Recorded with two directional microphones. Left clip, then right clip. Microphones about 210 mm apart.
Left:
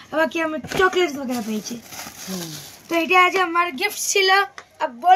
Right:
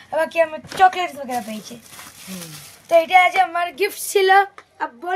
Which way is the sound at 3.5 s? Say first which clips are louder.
Left 1 dB; 45° right (ahead or behind).